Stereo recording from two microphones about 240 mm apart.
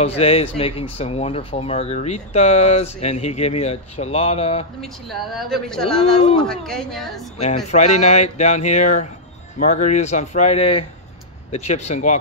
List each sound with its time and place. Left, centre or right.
0.0 s speech: left
4.8 s speech: centre
7.3 s speech: left